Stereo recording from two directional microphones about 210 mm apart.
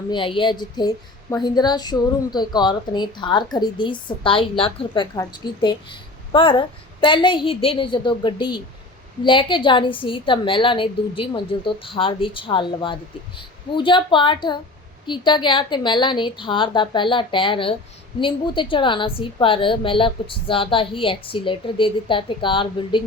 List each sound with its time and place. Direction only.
0.1 s speech: 25° left (ahead or behind)